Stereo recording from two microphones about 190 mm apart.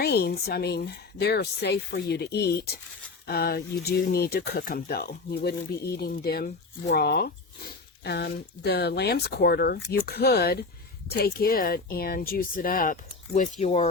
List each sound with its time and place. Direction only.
0.0 s speech: 55° left (ahead or behind); by 13.8 s 35° left (ahead or behind)